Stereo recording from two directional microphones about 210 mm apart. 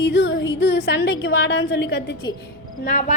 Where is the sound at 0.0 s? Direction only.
55° left (ahead or behind).